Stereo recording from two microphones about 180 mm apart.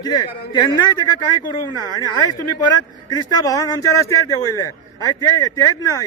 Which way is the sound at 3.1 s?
20° left (ahead or behind).